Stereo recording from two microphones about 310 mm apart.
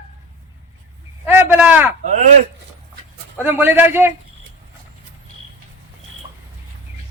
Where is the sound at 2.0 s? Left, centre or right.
Right.